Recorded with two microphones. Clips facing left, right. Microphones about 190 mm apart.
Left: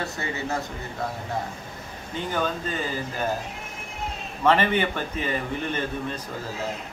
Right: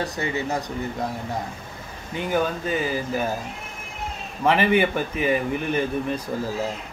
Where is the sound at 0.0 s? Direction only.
15° right (ahead or behind).